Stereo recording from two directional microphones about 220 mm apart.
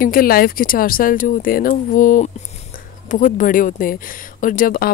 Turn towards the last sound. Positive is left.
turn(degrees=40)  # may be behind; listen again after turning